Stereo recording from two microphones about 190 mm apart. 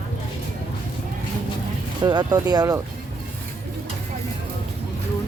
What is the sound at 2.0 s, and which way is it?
Speech, 20° right (ahead or behind).